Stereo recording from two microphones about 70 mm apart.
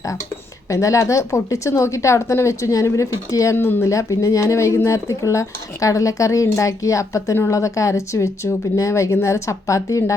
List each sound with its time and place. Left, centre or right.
0.7 s a woman's voice: left